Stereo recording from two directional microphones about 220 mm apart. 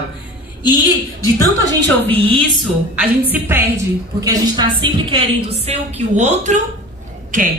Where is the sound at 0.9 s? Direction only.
15° left (ahead or behind).